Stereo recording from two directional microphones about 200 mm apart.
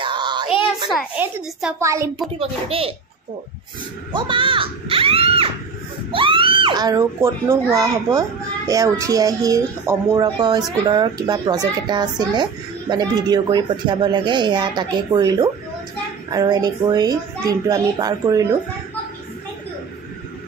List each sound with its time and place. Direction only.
0.0 s a sound: 25° right (ahead or behind)
0.8 s a child's voice: centre (ahead or behind)
2.3 s a child's voice: 30° right (ahead or behind)
4.1 s a child's voice: 25° right (ahead or behind)